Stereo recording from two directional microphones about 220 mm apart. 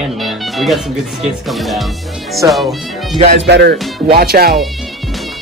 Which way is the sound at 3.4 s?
50° right (ahead or behind).